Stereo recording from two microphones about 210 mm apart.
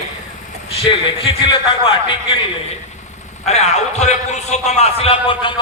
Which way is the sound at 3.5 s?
30° left (ahead or behind).